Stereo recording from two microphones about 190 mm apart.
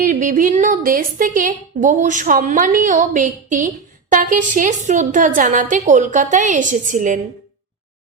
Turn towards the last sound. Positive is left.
turn(degrees=-45)  # may be behind; listen again after turning